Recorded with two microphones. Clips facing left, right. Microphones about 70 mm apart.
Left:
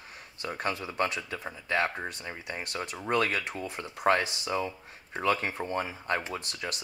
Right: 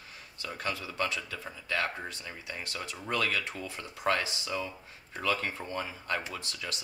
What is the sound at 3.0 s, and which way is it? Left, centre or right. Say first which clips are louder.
Speech: left 3 dB; left.